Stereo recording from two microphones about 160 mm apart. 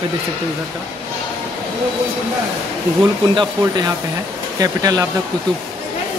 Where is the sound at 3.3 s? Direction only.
25° right (ahead or behind).